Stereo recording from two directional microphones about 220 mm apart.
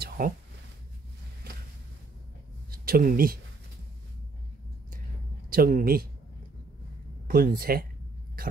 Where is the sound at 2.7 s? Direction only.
40° right (ahead or behind).